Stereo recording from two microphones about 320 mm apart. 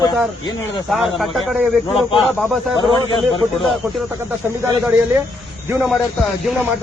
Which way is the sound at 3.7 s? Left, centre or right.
Centre.